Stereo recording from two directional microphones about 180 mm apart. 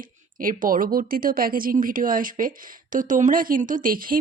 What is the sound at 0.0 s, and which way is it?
Speech, 50° right (ahead or behind).